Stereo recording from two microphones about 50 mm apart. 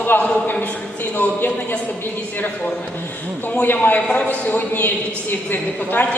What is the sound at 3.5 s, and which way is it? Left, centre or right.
A woman's voice, left.